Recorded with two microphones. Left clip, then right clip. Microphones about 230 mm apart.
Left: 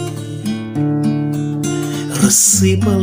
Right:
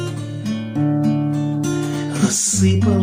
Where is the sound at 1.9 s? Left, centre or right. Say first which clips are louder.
Left 4 dB; left.